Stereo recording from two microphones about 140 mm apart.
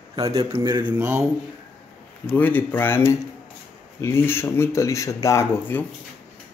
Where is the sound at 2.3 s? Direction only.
15° left (ahead or behind).